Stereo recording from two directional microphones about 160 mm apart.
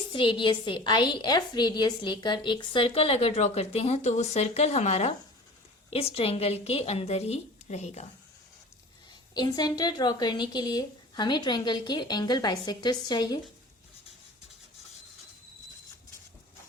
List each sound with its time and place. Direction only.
0.1 s a woman's voice: 30° left (ahead or behind)
9.3 s a woman's voice: 25° left (ahead or behind)